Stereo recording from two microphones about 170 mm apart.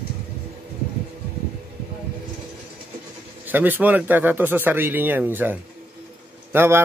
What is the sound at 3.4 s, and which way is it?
Speech, 10° right (ahead or behind).